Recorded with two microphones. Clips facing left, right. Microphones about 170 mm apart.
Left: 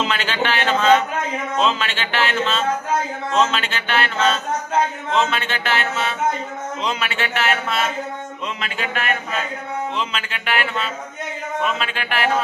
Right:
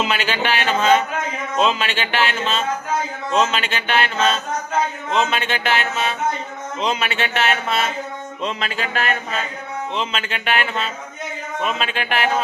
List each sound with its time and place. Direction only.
0.0 s speech: 10° right (ahead or behind)
8.4 s music: 35° right (ahead or behind)
9.9 s speech: 25° right (ahead or behind)